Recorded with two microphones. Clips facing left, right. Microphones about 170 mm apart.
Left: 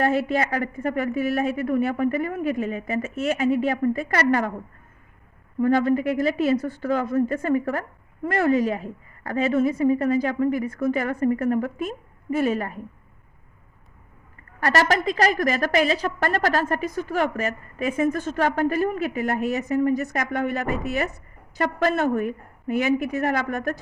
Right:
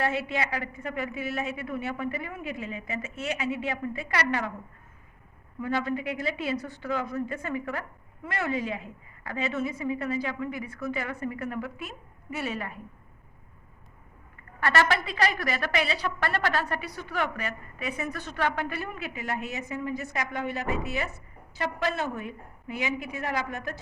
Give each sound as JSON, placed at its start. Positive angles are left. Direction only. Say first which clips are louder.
{"t": 0.0, "sound": "a woman's voice", "louder": "left 7 dB", "side_deg": 45}
{"t": 5.5, "sound": "a woman's voice", "louder": "left 10 dB", "side_deg": 50}
{"t": 14.6, "sound": "a woman's voice", "louder": "left 4 dB", "side_deg": 40}